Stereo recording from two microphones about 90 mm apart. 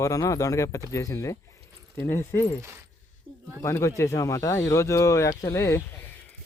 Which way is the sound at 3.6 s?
30° left (ahead or behind).